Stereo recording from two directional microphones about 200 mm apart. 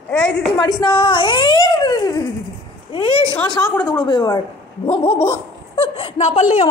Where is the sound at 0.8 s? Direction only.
25° left (ahead or behind).